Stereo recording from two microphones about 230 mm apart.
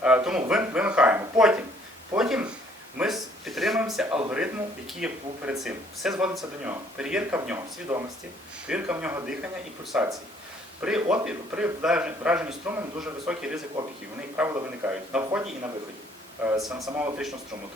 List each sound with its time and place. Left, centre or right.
0.0 s speech: centre
3.0 s a sound: centre
4.9 s speech: centre